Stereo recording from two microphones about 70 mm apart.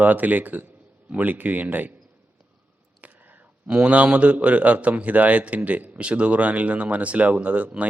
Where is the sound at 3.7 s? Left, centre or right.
Centre.